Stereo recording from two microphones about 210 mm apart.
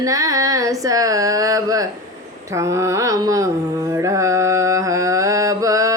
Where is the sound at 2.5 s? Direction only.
15° right (ahead or behind).